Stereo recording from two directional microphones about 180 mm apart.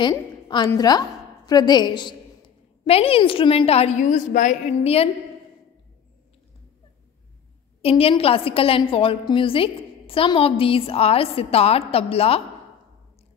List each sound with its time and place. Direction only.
0.7 s a woman's voice: 20° left (ahead or behind)
7.8 s a woman's voice: 30° left (ahead or behind)